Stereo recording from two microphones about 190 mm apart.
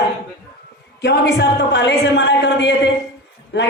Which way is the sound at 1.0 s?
60° left (ahead or behind).